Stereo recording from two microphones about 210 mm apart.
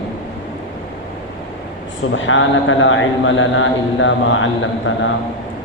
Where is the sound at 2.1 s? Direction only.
65° left (ahead or behind).